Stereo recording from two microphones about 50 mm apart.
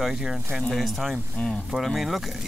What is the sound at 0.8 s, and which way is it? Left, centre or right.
Speech, centre.